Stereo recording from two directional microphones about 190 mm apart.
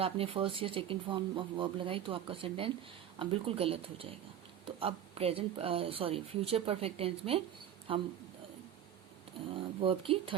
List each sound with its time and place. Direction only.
0.0 s speech: 30° right (ahead or behind)
9.6 s speech: 25° right (ahead or behind)